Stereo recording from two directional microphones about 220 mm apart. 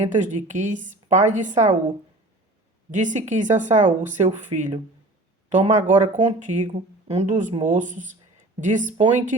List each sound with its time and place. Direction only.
0.1 s speech: 35° right (ahead or behind)
2.9 s speech: 35° right (ahead or behind)